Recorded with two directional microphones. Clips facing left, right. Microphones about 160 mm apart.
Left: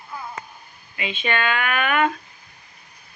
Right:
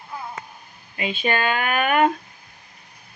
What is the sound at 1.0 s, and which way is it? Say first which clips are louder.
Speech: right 2 dB; 40° right (ahead or behind).